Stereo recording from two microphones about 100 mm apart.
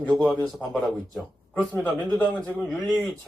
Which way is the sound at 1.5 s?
15° left (ahead or behind).